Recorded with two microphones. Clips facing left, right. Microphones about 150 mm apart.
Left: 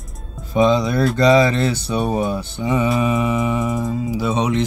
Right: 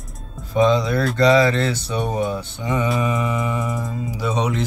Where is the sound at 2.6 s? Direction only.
5° left (ahead or behind).